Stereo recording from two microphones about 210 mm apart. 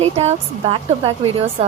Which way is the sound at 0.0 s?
30° right (ahead or behind).